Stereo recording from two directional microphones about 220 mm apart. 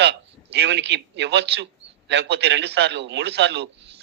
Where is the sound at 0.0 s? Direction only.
50° right (ahead or behind).